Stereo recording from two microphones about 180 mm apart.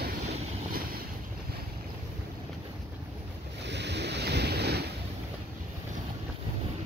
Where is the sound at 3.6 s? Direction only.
75° right (ahead or behind).